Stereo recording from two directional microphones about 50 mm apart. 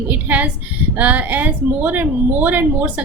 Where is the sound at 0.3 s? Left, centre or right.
Right.